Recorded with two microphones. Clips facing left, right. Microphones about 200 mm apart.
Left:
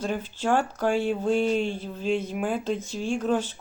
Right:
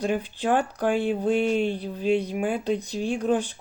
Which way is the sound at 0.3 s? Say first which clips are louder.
Right 1 dB; 15° right (ahead or behind).